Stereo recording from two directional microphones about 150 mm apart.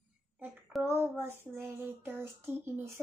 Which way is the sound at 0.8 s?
15° right (ahead or behind).